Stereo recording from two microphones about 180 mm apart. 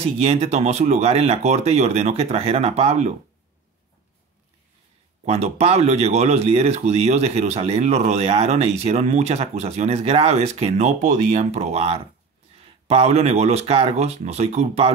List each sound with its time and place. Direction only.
0.2 s speech: 35° right (ahead or behind)
5.2 s speech: 35° right (ahead or behind)